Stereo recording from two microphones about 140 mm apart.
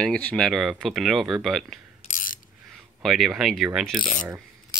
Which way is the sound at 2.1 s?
75° left (ahead or behind).